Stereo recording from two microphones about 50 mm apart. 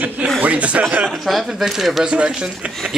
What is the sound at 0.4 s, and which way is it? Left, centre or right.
Speech, right.